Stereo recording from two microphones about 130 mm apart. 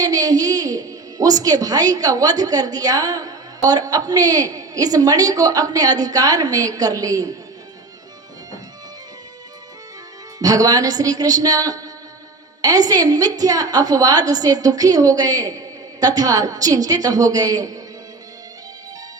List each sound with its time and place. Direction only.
0.0 s a woman's voice: 30° right (ahead or behind)
10.4 s a woman's voice: 30° right (ahead or behind)